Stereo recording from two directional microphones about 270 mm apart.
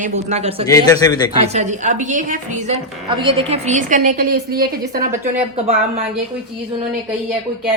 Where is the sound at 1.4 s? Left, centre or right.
Right.